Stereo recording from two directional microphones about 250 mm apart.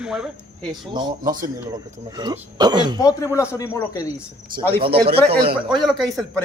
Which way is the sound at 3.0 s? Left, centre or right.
Centre.